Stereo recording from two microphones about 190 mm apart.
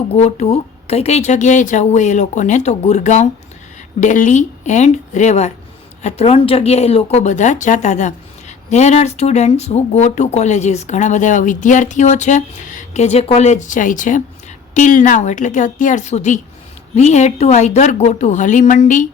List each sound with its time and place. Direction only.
0.2 s a woman's voice: 35° left (ahead or behind)